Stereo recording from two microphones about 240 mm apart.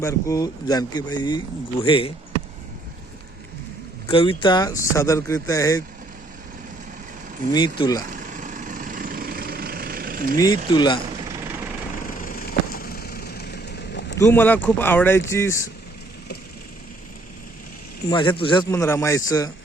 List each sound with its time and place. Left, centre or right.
0.0 s speech: centre
4.1 s speech: left
7.5 s speech: centre
8.1 s vehicle: right
10.7 s speech: centre
12.2 s vehicle: left
14.2 s speech: centre
18.1 s speech: centre